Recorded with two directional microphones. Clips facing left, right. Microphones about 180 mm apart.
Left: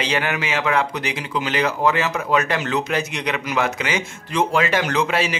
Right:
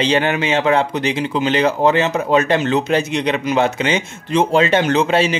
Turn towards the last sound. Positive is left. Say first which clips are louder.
# right 6 dB
turn(degrees=-25)  # may be behind; listen again after turning